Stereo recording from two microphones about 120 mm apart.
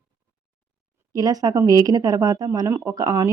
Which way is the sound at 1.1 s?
30° right (ahead or behind).